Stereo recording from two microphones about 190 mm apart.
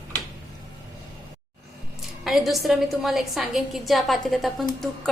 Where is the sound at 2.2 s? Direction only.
Centre (ahead or behind).